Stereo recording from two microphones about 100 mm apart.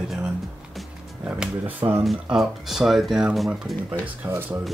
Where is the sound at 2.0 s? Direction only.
5° right (ahead or behind).